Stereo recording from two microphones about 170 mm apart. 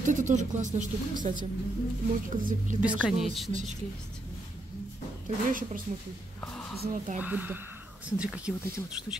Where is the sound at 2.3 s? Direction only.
50° right (ahead or behind).